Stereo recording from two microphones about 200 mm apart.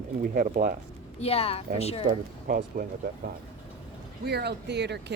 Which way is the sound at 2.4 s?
45° right (ahead or behind).